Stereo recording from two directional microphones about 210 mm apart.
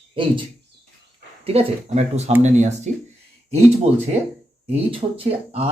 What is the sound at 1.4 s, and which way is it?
Speech, 30° right (ahead or behind).